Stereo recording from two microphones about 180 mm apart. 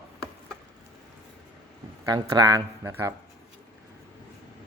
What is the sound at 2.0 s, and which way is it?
Speech, 20° right (ahead or behind).